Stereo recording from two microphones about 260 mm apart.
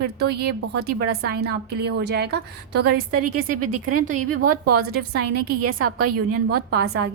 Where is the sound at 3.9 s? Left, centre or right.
Right.